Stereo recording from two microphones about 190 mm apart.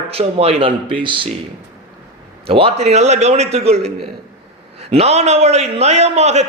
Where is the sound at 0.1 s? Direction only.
30° right (ahead or behind).